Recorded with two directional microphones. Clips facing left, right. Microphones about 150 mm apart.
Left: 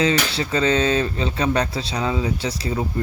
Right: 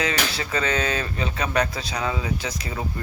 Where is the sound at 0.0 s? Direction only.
30° left (ahead or behind).